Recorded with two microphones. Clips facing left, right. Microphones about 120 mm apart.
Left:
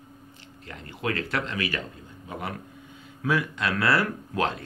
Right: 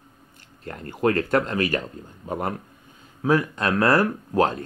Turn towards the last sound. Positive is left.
turn(degrees=-40)  # may be behind; listen again after turning